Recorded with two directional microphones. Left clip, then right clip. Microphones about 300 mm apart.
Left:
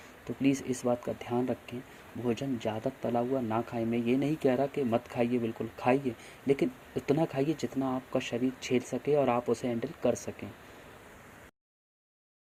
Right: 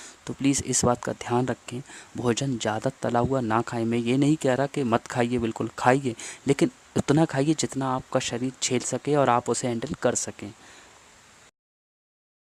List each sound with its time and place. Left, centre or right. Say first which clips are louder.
0.3 s speech: right 4 dB; right